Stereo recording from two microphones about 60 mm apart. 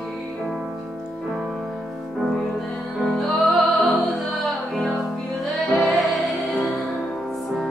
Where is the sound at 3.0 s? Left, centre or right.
Centre.